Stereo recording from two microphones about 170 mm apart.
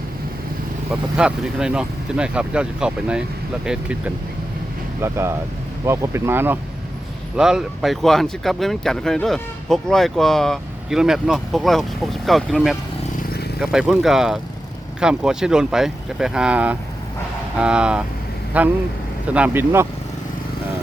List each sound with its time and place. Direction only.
1.1 s speech: 5° right (ahead or behind)